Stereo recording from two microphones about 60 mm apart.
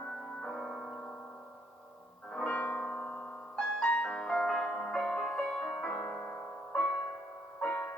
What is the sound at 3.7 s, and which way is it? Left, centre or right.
Music, centre.